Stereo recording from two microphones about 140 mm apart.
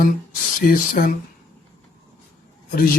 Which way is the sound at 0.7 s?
90° left.